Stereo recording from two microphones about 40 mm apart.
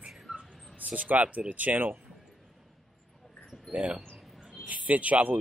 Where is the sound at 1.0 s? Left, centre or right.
Right.